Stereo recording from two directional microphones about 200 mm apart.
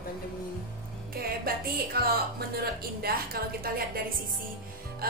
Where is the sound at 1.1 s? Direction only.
50° right (ahead or behind).